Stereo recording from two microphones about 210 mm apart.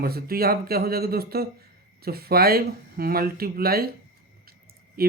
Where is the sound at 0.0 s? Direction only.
45° right (ahead or behind).